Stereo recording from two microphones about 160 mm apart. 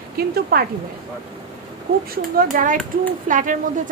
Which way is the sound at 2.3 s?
60° right (ahead or behind).